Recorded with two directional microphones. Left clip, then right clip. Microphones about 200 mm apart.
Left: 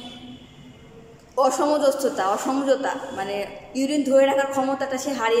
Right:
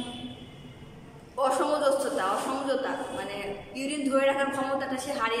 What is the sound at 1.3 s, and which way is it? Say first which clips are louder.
A man's voice: left 6 dB; 30° left (ahead or behind).